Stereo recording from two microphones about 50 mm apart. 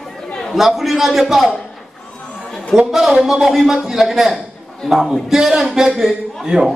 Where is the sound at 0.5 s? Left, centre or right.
Centre.